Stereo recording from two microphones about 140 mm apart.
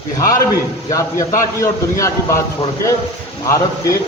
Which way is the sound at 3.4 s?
20° left (ahead or behind).